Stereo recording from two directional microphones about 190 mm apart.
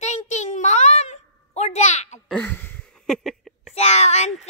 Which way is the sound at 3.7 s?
35° left (ahead or behind).